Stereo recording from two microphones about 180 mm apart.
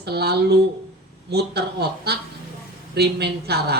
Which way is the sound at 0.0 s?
65° right (ahead or behind).